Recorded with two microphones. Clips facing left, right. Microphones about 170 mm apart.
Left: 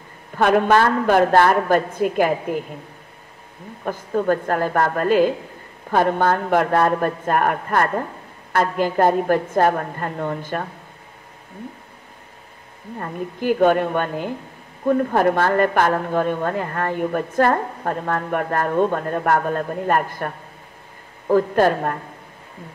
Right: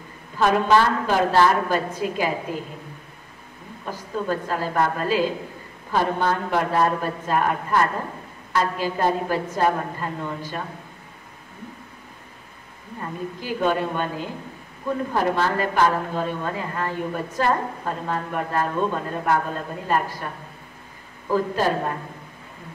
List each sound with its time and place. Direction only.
0.4 s a woman's voice: 55° left (ahead or behind)
3.8 s a woman's voice: 55° left (ahead or behind)
13.0 s a woman's voice: 55° left (ahead or behind)